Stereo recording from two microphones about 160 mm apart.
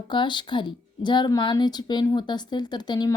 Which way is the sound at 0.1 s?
30° left (ahead or behind).